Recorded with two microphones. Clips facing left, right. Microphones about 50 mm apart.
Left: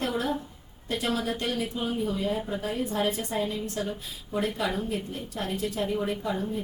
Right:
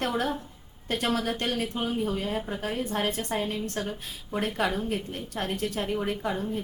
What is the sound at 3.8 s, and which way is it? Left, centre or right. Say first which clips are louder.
A woman's voice: left 1 dB; right.